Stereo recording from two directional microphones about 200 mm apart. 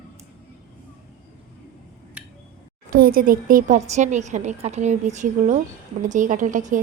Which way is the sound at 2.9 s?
45° right (ahead or behind).